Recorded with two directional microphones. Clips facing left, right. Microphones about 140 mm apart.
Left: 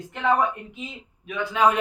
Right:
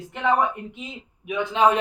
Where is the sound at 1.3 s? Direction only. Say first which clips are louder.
Right 1 dB; 20° right (ahead or behind).